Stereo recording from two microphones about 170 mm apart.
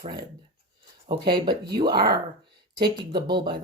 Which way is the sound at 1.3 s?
25° right (ahead or behind).